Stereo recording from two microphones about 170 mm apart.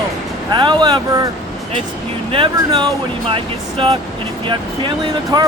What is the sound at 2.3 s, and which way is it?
Speech, 30° right (ahead or behind).